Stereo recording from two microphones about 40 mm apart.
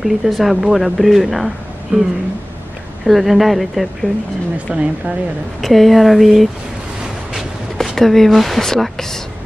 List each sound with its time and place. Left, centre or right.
0.0 s speech: centre
1.9 s speech: right
3.1 s speech: centre
4.7 s speech: right
5.6 s speech: centre
7.8 s speech: centre